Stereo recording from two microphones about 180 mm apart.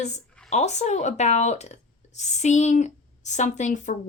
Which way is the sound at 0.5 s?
40° left (ahead or behind).